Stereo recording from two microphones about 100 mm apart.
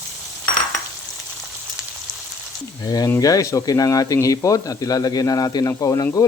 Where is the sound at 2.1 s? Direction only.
Centre (ahead or behind).